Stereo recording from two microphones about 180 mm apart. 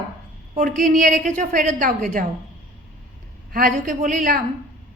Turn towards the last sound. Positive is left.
turn(degrees=-45)  # may be behind; listen again after turning